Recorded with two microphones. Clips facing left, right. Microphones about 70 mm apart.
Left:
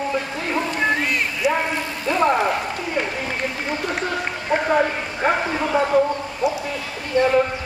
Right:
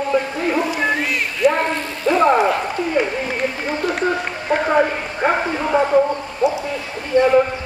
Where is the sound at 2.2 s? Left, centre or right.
Centre.